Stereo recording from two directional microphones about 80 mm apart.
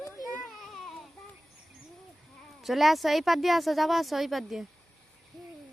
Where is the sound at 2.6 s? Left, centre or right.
Centre.